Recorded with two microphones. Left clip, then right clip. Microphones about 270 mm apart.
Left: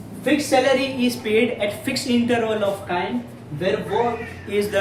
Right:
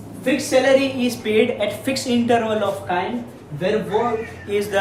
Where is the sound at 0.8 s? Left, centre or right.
Centre.